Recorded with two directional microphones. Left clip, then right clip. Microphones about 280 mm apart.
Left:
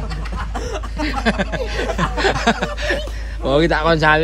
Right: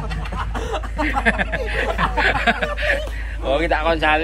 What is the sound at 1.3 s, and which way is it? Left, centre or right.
Speech, centre.